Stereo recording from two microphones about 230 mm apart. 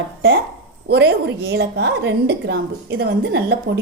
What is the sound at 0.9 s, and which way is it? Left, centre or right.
A woman's voice, right.